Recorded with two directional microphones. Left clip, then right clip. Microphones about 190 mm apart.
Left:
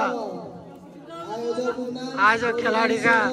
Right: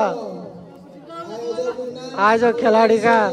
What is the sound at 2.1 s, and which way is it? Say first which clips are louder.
Speech: right 4 dB; 25° right (ahead or behind).